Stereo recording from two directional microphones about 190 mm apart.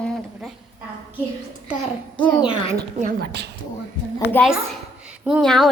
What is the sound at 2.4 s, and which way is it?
Speech, 25° left (ahead or behind).